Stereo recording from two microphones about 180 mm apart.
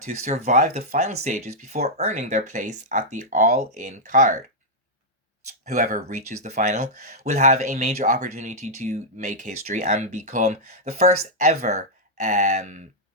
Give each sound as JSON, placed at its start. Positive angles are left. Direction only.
{"t": 0.3, "sound": "speech", "side_deg": -40}
{"t": 5.6, "sound": "speech", "side_deg": -45}